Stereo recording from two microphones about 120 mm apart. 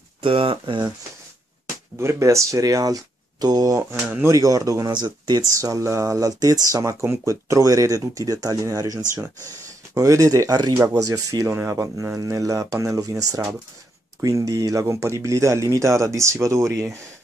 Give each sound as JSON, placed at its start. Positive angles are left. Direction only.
{"t": 0.2, "sound": "speech", "side_deg": -45}
{"t": 2.0, "sound": "speech", "side_deg": -25}
{"t": 4.1, "sound": "speech", "side_deg": -20}
{"t": 4.4, "sound": "speech", "side_deg": -30}
{"t": 5.5, "sound": "speech", "side_deg": -25}